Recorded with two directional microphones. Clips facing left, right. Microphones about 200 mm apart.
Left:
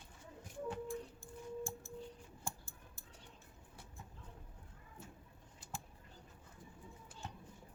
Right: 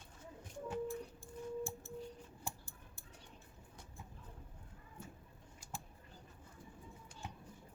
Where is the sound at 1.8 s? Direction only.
40° left (ahead or behind).